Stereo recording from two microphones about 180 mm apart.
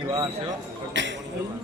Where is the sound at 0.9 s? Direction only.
90° right.